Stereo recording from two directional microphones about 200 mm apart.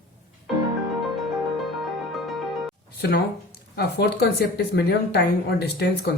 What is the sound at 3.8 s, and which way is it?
Speech, 50° left (ahead or behind).